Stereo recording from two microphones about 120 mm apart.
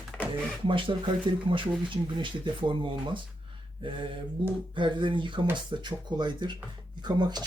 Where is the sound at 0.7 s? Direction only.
45° right (ahead or behind).